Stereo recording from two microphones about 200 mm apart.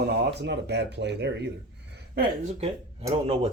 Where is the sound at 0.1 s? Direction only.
55° right (ahead or behind).